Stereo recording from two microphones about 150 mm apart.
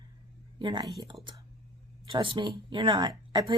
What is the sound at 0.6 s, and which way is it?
Speech, 30° right (ahead or behind).